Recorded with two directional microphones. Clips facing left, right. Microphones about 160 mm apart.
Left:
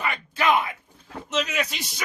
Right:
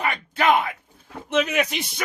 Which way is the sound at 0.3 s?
60° right (ahead or behind).